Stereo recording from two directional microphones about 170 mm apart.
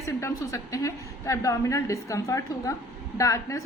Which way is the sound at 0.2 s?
20° left (ahead or behind).